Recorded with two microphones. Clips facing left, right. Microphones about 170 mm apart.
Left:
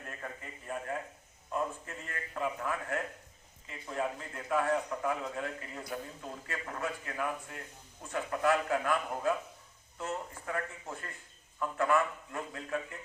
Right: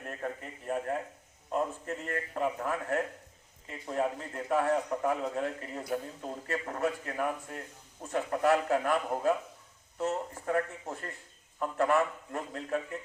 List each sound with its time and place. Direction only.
0.7 s a sound: 40° right (ahead or behind)
1.5 s music: 40° right (ahead or behind)
3.7 s a man's voice: 35° right (ahead or behind)